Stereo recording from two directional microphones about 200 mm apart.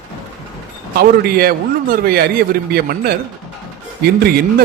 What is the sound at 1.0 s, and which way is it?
Speech, 50° right (ahead or behind).